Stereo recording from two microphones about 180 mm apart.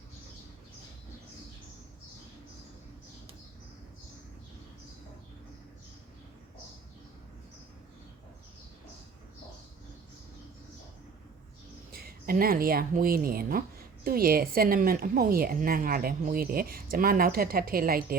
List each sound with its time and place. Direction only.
11.9 s speech: 55° right (ahead or behind)